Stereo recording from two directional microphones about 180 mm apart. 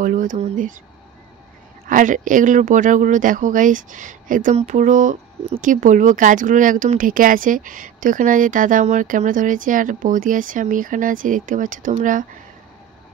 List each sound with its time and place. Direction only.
0.0 s speech: 45° right (ahead or behind)
1.9 s speech: 45° right (ahead or behind)